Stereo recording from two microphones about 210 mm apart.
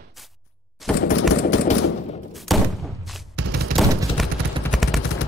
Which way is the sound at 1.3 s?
60° left (ahead or behind).